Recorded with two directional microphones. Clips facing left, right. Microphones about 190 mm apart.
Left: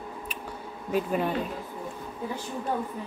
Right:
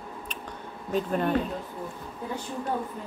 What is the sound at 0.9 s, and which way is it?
Speech, 5° left (ahead or behind).